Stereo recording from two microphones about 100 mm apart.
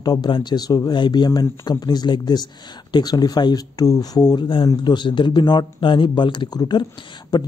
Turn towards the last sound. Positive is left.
turn(degrees=45)  # may be behind; listen again after turning